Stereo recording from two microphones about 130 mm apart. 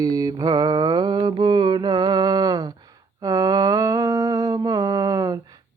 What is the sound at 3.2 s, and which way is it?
Humming, 25° right (ahead or behind).